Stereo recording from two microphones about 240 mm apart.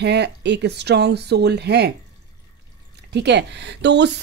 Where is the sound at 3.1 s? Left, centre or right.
Right.